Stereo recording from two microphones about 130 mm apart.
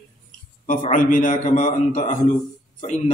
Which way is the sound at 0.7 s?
70° left (ahead or behind).